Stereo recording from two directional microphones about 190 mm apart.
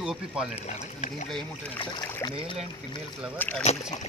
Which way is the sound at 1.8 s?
25° left (ahead or behind).